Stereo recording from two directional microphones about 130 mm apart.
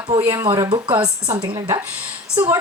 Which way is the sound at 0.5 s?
30° right (ahead or behind).